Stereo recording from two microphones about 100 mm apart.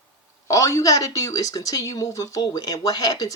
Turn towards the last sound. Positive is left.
turn(degrees=40)  # may be behind; listen again after turning